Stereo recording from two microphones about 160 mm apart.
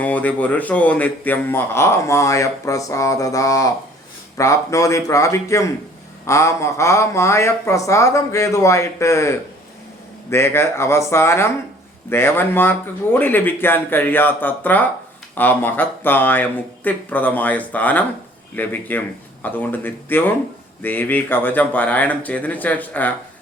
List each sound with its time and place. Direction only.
0.0 s a man's voice: 10° left (ahead or behind)